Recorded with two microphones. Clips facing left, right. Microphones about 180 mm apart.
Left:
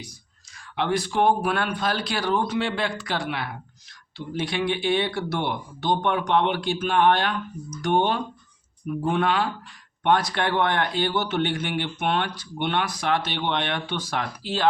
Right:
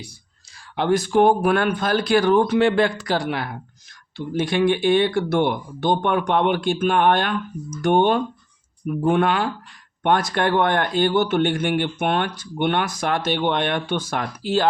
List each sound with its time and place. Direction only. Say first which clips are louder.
0.8 s speech: right 6 dB; 45° right (ahead or behind)